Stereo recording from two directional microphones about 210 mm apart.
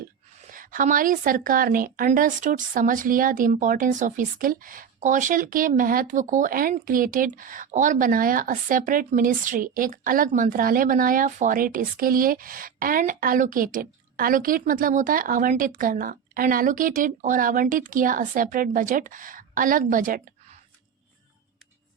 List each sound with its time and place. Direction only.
0.5 s a woman's voice: 40° right (ahead or behind)